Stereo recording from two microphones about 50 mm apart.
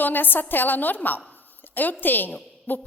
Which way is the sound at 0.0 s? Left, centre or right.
Left.